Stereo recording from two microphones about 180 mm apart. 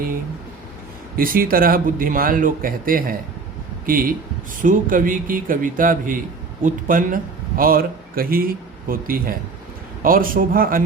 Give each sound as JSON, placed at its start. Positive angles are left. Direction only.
{"t": 1.1, "sound": "speech", "side_deg": -55}